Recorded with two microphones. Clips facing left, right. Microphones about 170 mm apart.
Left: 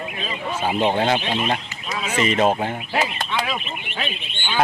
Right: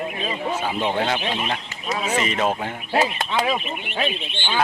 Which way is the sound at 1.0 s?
35° left (ahead or behind).